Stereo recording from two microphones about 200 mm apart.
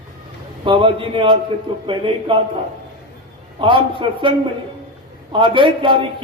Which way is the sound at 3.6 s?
25° right (ahead or behind).